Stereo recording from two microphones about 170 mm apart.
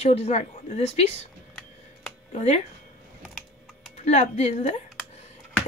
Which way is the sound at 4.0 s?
40° left (ahead or behind).